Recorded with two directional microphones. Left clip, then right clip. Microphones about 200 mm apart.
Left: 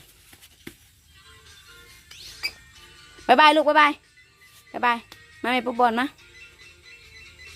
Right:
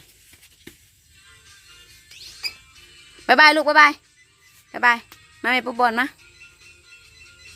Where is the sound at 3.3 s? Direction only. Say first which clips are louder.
Right 2 dB; centre (ahead or behind).